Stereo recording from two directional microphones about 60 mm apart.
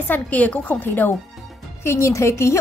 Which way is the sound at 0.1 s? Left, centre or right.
Left.